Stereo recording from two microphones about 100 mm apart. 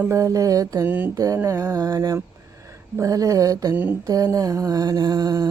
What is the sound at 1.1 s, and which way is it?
Mantra, 35° right (ahead or behind).